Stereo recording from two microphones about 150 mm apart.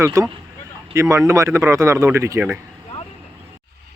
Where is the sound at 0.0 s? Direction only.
20° right (ahead or behind).